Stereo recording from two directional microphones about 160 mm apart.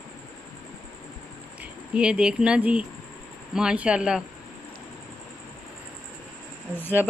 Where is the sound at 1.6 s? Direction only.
5° right (ahead or behind).